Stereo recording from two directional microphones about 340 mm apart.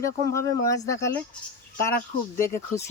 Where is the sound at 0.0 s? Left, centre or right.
Centre.